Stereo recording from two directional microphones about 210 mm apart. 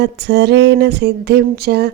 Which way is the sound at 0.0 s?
55° right (ahead or behind).